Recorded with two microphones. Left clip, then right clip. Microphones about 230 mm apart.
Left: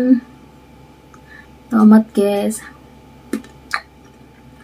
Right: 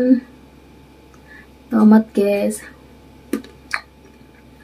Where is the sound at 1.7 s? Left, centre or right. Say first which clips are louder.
Left 2 dB; centre.